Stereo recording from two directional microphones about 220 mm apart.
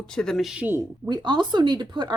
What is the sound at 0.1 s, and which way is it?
Speech, 5° left (ahead or behind).